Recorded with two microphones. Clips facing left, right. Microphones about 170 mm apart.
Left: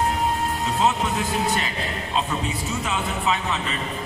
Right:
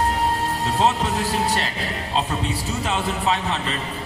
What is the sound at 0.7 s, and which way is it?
A man's voice, 35° right (ahead or behind).